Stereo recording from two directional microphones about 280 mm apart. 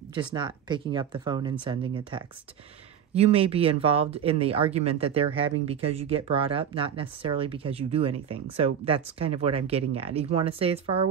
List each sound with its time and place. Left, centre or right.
0.1 s speech: centre